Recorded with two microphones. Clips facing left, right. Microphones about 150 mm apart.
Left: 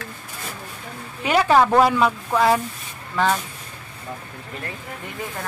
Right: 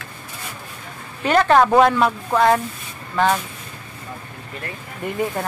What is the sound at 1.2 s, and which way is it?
A woman's voice, 10° left (ahead or behind).